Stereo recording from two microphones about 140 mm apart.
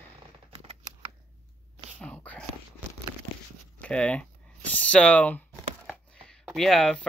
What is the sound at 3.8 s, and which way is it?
Speech, 10° left (ahead or behind).